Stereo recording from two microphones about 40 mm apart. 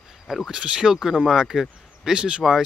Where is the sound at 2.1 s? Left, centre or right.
Right.